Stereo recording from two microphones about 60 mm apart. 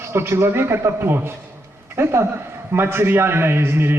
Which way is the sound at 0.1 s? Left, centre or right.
Right.